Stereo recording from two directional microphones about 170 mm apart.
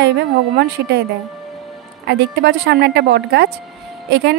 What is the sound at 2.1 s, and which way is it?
A woman's voice, 85° right.